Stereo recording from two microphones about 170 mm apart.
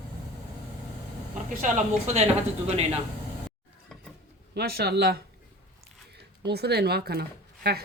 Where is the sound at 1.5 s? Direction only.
50° right (ahead or behind).